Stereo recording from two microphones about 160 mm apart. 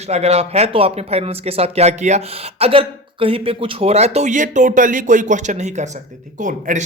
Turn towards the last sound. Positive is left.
turn(degrees=-50)  # may be behind; listen again after turning